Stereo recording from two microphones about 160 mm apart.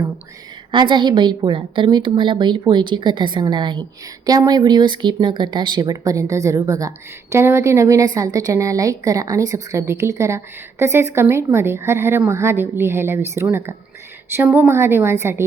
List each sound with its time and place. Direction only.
0.7 s a woman's voice: 30° right (ahead or behind)